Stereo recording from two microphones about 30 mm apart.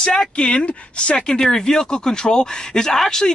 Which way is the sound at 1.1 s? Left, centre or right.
Left.